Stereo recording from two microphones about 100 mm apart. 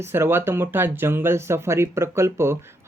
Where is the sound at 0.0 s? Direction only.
25° right (ahead or behind).